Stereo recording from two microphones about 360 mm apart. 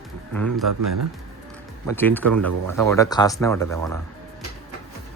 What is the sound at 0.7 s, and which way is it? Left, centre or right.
Speech, right.